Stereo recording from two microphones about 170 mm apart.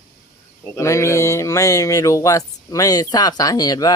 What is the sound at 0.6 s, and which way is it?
Speech, 15° left (ahead or behind).